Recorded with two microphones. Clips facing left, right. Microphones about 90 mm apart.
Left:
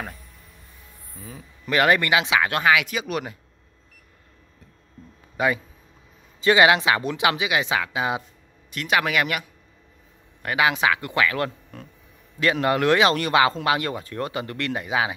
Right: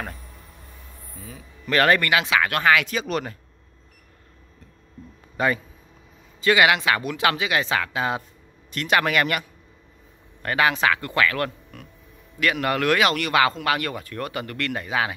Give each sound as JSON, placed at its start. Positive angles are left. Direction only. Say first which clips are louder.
{"t": 1.7, "sound": "speech", "louder": "even", "side_deg": 15}
{"t": 2.7, "sound": "speech", "louder": "right 1 dB", "side_deg": 10}
{"t": 5.4, "sound": "speech", "louder": "even", "side_deg": 10}
{"t": 6.4, "sound": "speech", "louder": "left 2 dB", "side_deg": 25}
{"t": 8.7, "sound": "speech", "louder": "right 1 dB", "side_deg": 5}